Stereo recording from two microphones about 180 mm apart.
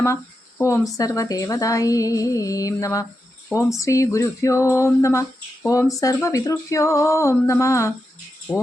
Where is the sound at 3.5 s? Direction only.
15° left (ahead or behind).